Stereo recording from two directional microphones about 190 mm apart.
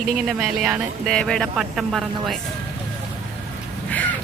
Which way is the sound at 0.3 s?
Centre (ahead or behind).